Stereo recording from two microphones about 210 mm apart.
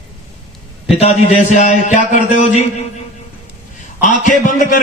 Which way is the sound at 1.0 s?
30° left (ahead or behind).